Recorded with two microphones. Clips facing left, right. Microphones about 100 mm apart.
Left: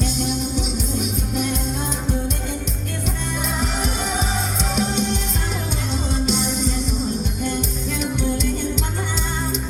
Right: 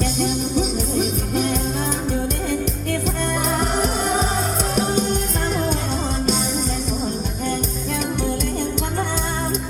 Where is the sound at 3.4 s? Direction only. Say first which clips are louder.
Right 3 dB; 50° right (ahead or behind).